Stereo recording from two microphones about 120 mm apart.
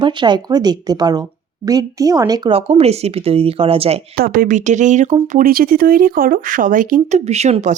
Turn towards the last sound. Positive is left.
turn(degrees=-80)